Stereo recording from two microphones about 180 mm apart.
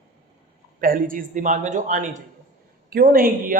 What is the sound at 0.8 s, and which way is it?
Speech, 50° right (ahead or behind).